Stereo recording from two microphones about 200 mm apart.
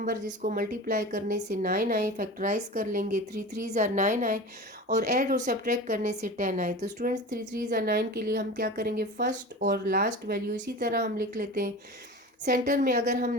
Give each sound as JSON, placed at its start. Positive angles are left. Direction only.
{"t": 0.3, "sound": "a woman's voice", "side_deg": -45}